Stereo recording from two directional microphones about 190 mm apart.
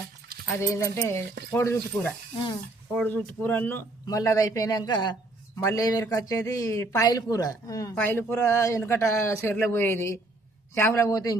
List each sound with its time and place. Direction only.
0.4 s a man's voice: 15° left (ahead or behind)